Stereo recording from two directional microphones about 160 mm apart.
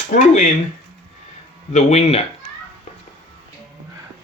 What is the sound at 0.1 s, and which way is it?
Speech, 55° left (ahead or behind).